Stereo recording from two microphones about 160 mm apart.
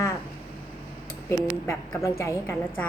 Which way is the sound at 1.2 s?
15° left (ahead or behind).